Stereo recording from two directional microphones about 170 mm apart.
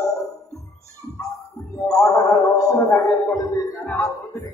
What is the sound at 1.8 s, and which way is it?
Music, 20° left (ahead or behind).